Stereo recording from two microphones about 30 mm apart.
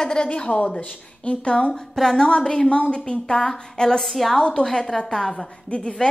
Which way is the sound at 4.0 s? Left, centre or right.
Centre.